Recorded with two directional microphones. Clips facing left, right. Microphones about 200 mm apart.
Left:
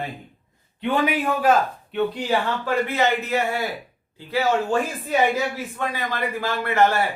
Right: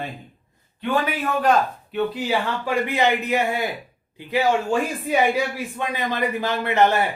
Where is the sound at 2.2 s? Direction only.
10° right (ahead or behind).